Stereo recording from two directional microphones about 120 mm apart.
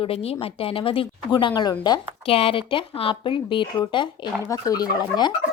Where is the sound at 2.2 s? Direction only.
50° left (ahead or behind).